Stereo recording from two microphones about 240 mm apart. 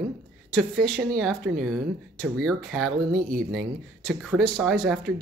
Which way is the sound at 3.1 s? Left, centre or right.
Right.